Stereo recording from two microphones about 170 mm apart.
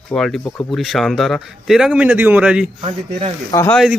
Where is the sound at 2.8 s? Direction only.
30° right (ahead or behind).